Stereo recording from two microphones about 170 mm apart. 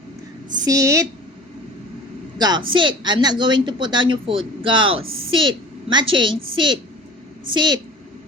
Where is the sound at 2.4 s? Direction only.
25° right (ahead or behind).